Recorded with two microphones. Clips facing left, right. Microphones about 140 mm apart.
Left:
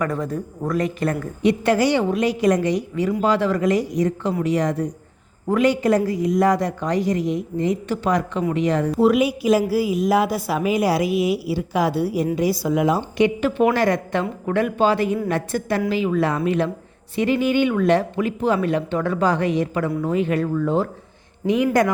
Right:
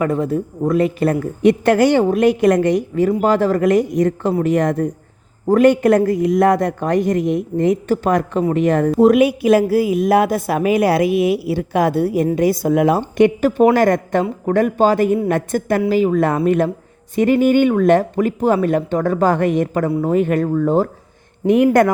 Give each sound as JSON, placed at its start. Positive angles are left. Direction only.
{"t": 0.0, "sound": "speech", "side_deg": -25}
{"t": 1.4, "sound": "a woman's voice", "side_deg": -55}
{"t": 21.4, "sound": "speech", "side_deg": -55}